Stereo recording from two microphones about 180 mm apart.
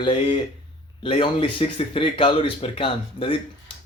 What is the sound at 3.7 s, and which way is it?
Finger snapping, 30° left (ahead or behind).